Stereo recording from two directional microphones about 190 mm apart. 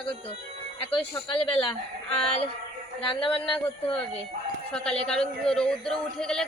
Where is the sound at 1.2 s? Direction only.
25° left (ahead or behind).